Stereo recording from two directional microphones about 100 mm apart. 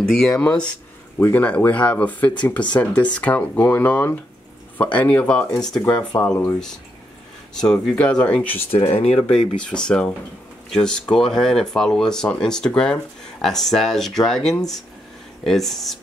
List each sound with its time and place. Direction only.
0.1 s speech: 10° left (ahead or behind)
5.9 s speech: 35° left (ahead or behind)
7.5 s speech: 5° left (ahead or behind)
8.7 s speech: 90° left
9.3 s speech: 10° left (ahead or behind)